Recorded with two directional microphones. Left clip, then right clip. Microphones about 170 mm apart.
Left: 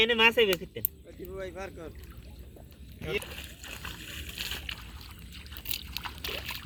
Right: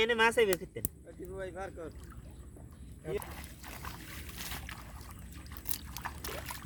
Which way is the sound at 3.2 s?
55° right (ahead or behind).